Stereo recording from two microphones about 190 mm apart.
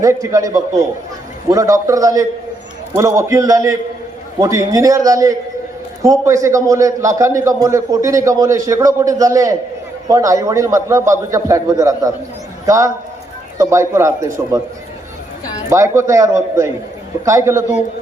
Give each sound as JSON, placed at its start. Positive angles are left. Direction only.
{"t": 0.0, "sound": "a man's voice", "side_deg": -15}
{"t": 15.7, "sound": "a man's voice", "side_deg": -15}